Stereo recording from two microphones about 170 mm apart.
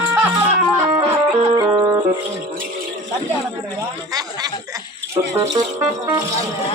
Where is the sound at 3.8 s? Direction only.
20° right (ahead or behind).